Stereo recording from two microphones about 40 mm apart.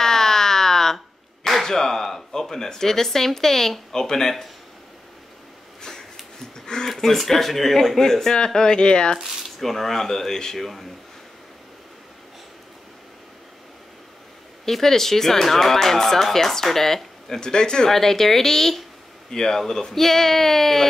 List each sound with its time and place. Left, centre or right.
0.0 s a sound: centre
0.9 s speech: centre
6.5 s a sound: centre
6.9 s speech: centre; by 9.2 s left
9.2 s speech: centre
14.6 s speech: centre
17.9 s speech: centre